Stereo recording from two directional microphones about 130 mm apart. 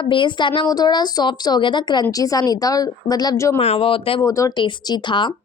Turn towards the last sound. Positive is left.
turn(degrees=35)  # may be behind; listen again after turning